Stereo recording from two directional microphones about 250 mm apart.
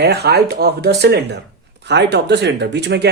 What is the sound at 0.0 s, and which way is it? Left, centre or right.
Speech, right.